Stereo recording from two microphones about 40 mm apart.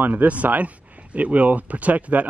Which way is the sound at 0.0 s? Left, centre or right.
Right.